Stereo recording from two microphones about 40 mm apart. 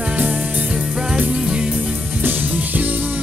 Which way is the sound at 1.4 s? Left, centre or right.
Right.